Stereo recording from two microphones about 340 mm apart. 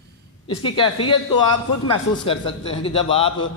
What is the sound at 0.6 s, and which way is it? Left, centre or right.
Speech, centre.